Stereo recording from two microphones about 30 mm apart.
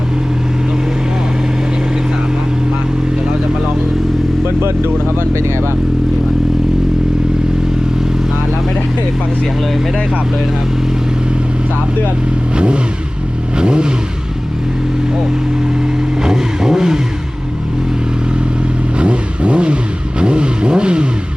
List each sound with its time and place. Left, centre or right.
13.6 s vehicle: right
16.2 s vehicle: right
18.9 s vehicle: right